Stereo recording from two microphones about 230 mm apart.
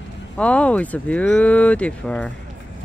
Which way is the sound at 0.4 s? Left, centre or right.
Centre.